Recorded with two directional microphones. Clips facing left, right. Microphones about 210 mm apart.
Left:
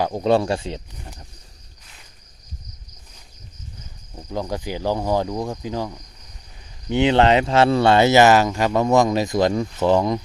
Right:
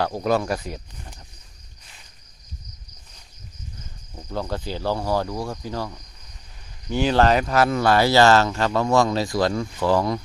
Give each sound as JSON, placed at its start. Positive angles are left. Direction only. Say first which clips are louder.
{"t": 0.0, "sound": "speech", "louder": "left 3 dB", "side_deg": 20}
{"t": 4.1, "sound": "speech", "louder": "left 2 dB", "side_deg": 15}